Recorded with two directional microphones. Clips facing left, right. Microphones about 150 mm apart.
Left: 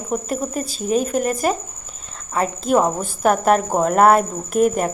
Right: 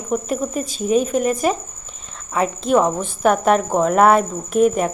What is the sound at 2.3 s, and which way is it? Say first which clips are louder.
A woman's voice: right 1 dB; 5° left (ahead or behind).